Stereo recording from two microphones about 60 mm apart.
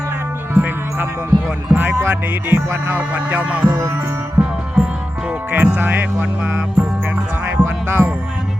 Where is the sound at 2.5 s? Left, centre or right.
Right.